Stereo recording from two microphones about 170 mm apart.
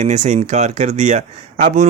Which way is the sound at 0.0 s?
45° right (ahead or behind).